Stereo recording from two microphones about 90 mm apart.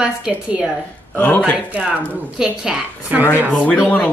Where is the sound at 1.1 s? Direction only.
20° left (ahead or behind).